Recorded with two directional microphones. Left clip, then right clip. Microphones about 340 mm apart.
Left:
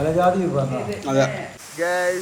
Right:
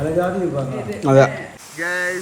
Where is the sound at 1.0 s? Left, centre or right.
Centre.